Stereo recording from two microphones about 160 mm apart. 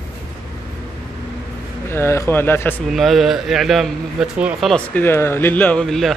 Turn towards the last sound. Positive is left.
turn(degrees=5)  # may be behind; listen again after turning